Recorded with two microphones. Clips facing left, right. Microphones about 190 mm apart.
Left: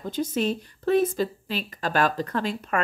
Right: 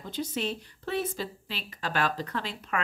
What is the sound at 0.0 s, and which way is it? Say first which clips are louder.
A woman's voice: left 6 dB; 45° left (ahead or behind).